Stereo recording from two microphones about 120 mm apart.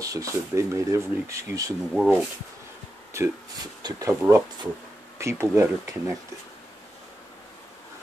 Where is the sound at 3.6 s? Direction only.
35° right (ahead or behind).